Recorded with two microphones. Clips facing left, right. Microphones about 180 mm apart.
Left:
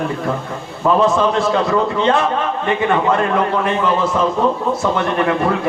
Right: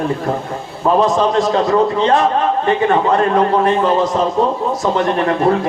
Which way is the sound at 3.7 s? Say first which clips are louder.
Right 3 dB; 35° right (ahead or behind).